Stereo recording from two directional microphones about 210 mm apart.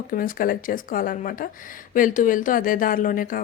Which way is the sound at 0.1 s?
40° left (ahead or behind).